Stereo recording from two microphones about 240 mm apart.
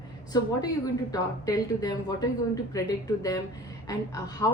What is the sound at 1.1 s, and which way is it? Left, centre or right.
A woman's voice, centre.